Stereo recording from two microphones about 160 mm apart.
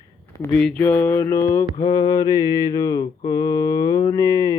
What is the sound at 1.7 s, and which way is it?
Mantra, 30° left (ahead or behind).